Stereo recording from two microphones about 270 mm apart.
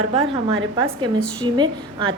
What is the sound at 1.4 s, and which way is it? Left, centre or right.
Speech, centre.